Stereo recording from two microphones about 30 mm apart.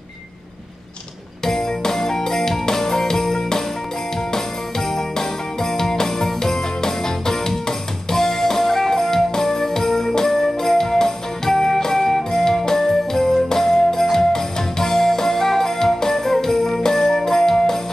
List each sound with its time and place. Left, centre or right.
1.4 s music: centre
4.3 s jingle bell: centre
13.5 s music: centre